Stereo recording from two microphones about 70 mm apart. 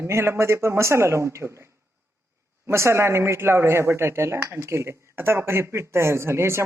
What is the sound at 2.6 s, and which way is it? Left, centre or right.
Speech, right.